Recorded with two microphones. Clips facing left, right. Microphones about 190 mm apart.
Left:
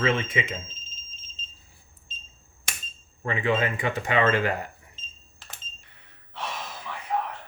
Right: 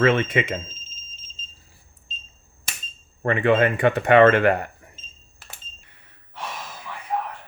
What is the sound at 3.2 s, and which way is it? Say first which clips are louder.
Speech: right 7 dB; 60° right (ahead or behind).